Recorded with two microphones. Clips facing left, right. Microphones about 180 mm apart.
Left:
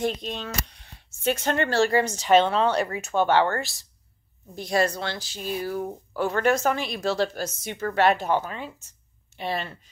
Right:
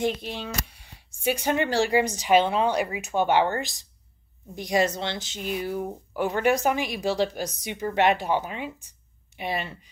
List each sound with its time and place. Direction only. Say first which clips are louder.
0.2 s speech: left 1 dB; 10° right (ahead or behind)